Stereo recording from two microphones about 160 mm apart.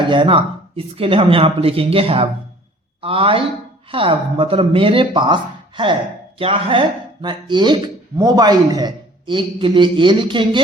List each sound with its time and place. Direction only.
0.1 s a man's voice: 30° right (ahead or behind)